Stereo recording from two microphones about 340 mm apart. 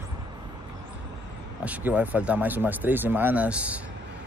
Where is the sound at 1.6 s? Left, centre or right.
Centre.